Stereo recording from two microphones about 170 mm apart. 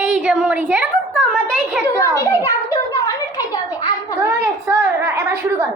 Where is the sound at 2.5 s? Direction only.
20° left (ahead or behind).